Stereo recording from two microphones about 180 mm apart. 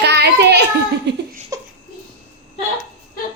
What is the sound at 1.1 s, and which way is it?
Laughter, 75° right (ahead or behind).